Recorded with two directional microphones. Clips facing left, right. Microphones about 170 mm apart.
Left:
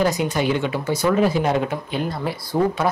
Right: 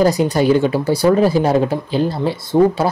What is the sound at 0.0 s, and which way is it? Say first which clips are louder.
Speech: right 6 dB; 35° right (ahead or behind).